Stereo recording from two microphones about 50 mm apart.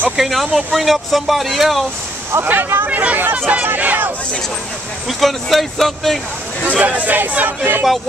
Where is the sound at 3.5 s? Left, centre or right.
Right.